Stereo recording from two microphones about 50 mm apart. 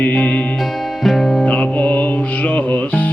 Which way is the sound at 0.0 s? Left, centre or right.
Left.